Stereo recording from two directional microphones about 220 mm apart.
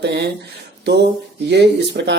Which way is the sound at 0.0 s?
50° right (ahead or behind).